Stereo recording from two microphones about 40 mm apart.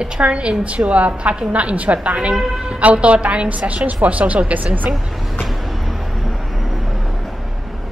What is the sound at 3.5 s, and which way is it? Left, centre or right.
A woman's voice, right.